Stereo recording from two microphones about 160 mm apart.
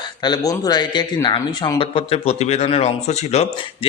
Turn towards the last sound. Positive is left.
turn(degrees=40)  # may be behind; listen again after turning